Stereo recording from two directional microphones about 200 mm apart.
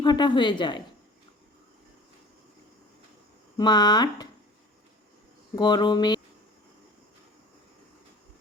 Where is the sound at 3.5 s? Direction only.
20° left (ahead or behind).